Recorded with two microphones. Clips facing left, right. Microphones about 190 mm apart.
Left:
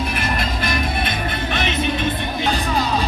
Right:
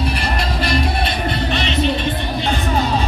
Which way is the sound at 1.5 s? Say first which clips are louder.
Right 2 dB; 50° left (ahead or behind).